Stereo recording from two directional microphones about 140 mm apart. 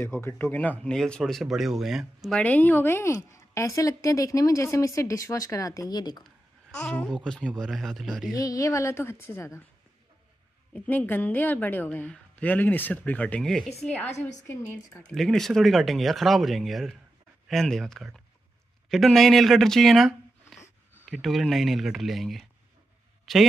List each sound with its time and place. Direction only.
0.0 s speech: 15° left (ahead or behind); by 2.4 s centre (ahead or behind)
2.4 s a woman's voice: 10° left (ahead or behind); by 6.2 s 30° left (ahead or behind)
6.9 s speech: 5° left (ahead or behind)
8.4 s a woman's voice: 25° left (ahead or behind)
10.7 s a woman's voice: 10° left (ahead or behind)
15.1 s speech: centre (ahead or behind)
21.1 s a man's voice: centre (ahead or behind)